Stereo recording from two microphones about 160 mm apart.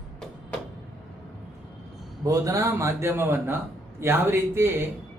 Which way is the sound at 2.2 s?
20° right (ahead or behind).